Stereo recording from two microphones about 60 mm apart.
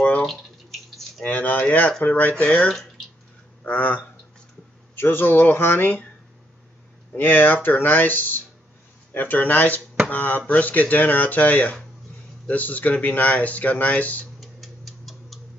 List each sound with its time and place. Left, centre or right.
1.2 s speech: left
1.9 s speech: centre
2.1 s speech: left
7.2 s speech: left
14.4 s tick-tock: centre